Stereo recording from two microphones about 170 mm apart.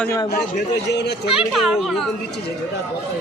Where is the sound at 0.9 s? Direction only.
80° left.